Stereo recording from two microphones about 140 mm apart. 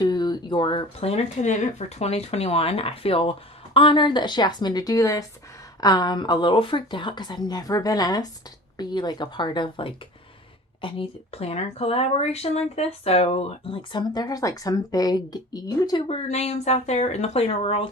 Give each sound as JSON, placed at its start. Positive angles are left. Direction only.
{"t": 0.0, "sound": "speech", "side_deg": 30}
{"t": 13.9, "sound": "a woman's voice", "side_deg": 30}
{"t": 16.0, "sound": "speech", "side_deg": 50}